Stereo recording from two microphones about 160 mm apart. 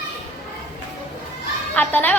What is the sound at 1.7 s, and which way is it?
Speech, 10° left (ahead or behind).